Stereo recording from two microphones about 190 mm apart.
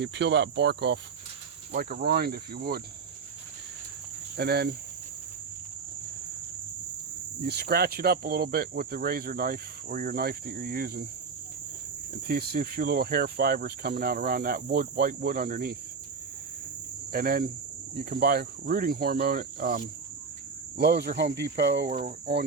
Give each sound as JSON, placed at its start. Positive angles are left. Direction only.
{"t": 0.0, "sound": "cricket", "side_deg": -65}
{"t": 1.7, "sound": "speech", "side_deg": -50}
{"t": 4.4, "sound": "cricket", "side_deg": -60}
{"t": 7.4, "sound": "speech", "side_deg": -60}
{"t": 12.3, "sound": "speech", "side_deg": -55}
{"t": 17.1, "sound": "speech", "side_deg": -50}
{"t": 20.7, "sound": "cricket", "side_deg": -55}
{"t": 21.8, "sound": "speech", "side_deg": -45}